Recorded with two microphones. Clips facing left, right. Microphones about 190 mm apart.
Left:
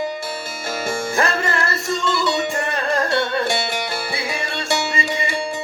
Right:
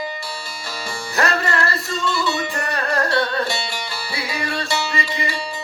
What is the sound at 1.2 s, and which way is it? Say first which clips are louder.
Music: right 3 dB; 25° left (ahead or behind).